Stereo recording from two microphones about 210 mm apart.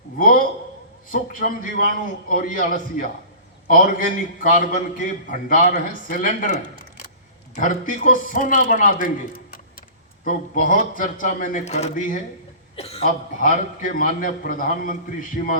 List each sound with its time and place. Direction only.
0.2 s a sound: 45° left (ahead or behind)
1.1 s a man's voice: 40° left (ahead or behind)
12.7 s a man's voice: 30° left (ahead or behind)